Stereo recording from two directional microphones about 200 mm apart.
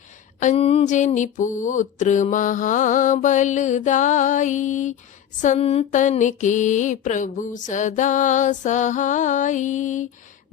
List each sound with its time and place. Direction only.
0.3 s mantra: 35° left (ahead or behind)